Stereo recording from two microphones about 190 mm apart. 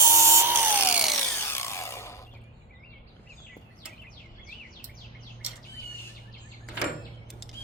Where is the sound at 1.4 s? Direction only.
10° left (ahead or behind).